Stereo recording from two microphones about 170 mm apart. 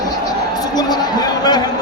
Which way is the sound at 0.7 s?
25° left (ahead or behind).